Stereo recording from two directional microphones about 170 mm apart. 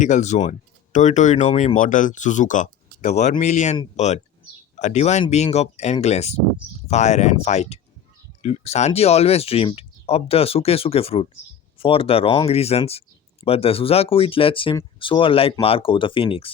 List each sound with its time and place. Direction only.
0.0 s speech: 45° left (ahead or behind)